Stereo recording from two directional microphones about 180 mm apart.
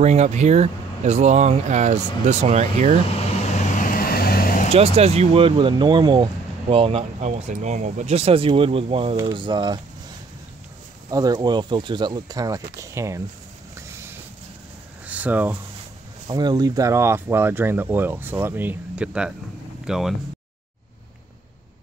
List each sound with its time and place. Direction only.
0.0 s speech: 40° right (ahead or behind)
3.5 s vehicle: 50° left (ahead or behind)
4.7 s speech: 35° right (ahead or behind)
11.1 s speech: 20° right (ahead or behind)
15.0 s speech: 10° right (ahead or behind)
16.3 s speech: 20° right (ahead or behind); by 20.2 s centre (ahead or behind)